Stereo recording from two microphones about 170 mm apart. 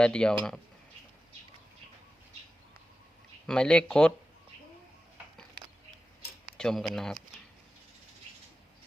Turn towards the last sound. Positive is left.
turn(degrees=0)  # may be behind; listen again after turning